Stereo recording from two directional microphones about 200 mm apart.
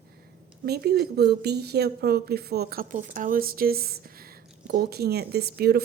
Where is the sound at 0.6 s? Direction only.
50° right (ahead or behind).